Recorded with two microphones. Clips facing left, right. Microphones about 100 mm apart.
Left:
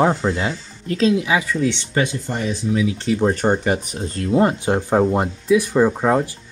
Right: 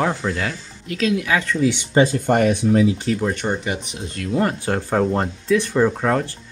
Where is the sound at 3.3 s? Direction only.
40° left (ahead or behind).